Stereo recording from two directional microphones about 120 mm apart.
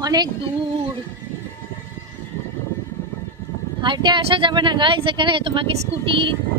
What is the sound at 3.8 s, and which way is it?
Speech, 40° right (ahead or behind).